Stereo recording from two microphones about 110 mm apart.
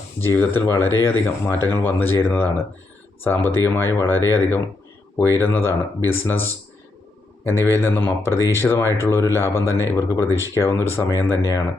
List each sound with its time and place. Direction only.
0.2 s speech: 20° left (ahead or behind)
7.7 s speech: 20° left (ahead or behind)